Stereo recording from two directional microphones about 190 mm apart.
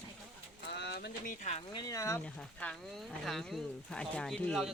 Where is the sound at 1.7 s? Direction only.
20° left (ahead or behind).